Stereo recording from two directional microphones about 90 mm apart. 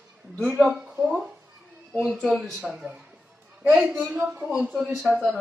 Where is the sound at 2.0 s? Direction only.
5° right (ahead or behind).